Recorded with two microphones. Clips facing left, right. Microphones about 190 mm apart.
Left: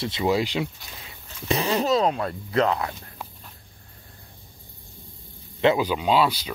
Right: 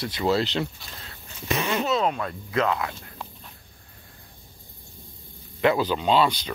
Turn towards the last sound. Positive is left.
turn(degrees=5)  # may be behind; listen again after turning